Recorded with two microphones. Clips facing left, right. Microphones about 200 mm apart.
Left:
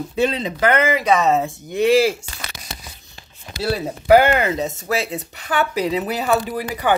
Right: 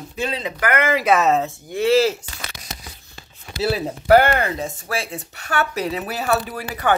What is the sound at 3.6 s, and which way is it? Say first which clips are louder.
Speech: right 1 dB; 5° right (ahead or behind).